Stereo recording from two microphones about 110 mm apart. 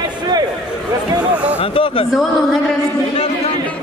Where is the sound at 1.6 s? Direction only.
55° left (ahead or behind).